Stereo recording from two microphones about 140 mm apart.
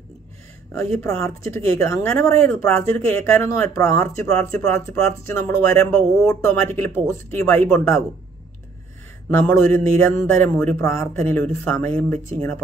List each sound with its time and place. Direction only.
1.0 s speech: 20° left (ahead or behind)
4.3 s speech: 5° left (ahead or behind)
4.7 s speech: 20° left (ahead or behind)
5.8 s speech: 5° left (ahead or behind)
6.2 s speech: 15° left (ahead or behind)
9.3 s speech: 15° left (ahead or behind)